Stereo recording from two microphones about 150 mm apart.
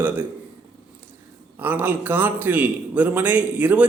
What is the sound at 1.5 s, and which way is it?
A man's voice, 10° right (ahead or behind).